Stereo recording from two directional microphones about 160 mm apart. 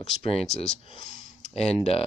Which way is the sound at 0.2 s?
40° left (ahead or behind).